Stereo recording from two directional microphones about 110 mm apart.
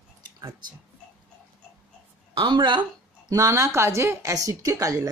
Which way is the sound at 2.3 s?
45° right (ahead or behind).